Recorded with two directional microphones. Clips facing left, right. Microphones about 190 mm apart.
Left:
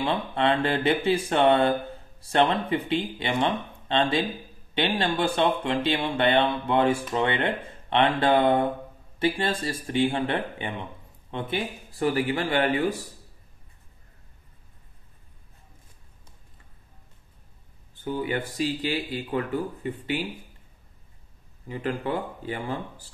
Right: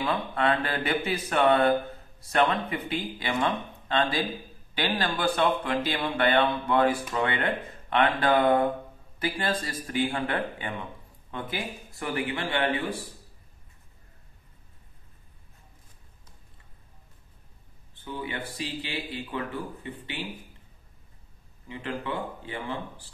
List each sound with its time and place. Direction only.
0.0 s speech: 25° left (ahead or behind)
18.0 s speech: 40° left (ahead or behind)
21.6 s speech: 40° left (ahead or behind)